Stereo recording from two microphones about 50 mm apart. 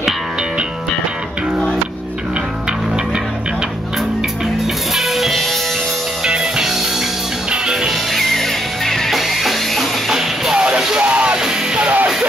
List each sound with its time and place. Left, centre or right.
4.9 s music: centre
6.2 s music: centre
7.9 s music: centre; by 11.3 s right
11.3 s music: centre
11.8 s music: right